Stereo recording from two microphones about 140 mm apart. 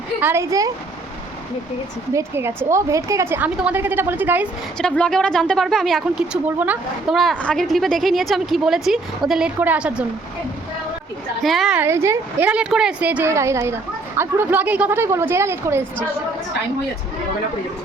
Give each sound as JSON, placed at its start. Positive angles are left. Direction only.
{"t": 0.2, "sound": "speech", "side_deg": -15}
{"t": 2.1, "sound": "a woman's voice", "side_deg": -15}
{"t": 4.8, "sound": "speech", "side_deg": 5}
{"t": 7.2, "sound": "a woman's voice", "side_deg": 0}
{"t": 11.4, "sound": "speech", "side_deg": 0}
{"t": 11.8, "sound": "a woman's voice", "side_deg": -20}